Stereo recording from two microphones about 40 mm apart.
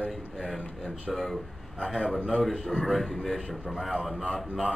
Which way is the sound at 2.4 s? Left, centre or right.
Centre.